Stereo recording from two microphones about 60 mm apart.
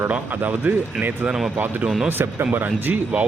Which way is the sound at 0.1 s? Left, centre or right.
Right.